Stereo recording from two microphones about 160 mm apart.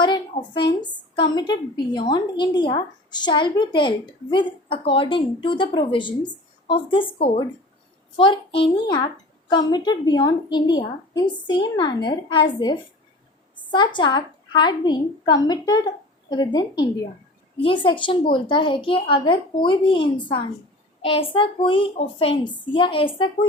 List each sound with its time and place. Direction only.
0.0 s a woman's voice: 30° left (ahead or behind)
8.1 s a woman's voice: 30° left (ahead or behind)